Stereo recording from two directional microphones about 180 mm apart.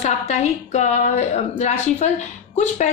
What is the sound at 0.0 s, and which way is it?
A woman's voice, 35° left (ahead or behind).